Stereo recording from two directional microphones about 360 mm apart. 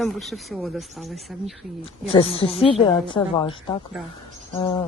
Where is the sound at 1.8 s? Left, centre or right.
Centre.